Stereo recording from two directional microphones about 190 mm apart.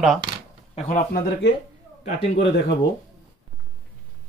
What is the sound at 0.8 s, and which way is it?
Speech, 45° left (ahead or behind).